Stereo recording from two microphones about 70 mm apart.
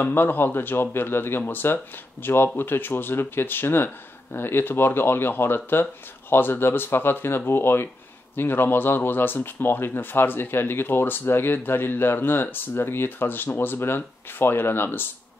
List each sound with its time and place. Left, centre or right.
0.0 s speech: left